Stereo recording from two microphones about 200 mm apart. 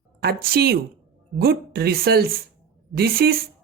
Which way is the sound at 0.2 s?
50° right (ahead or behind).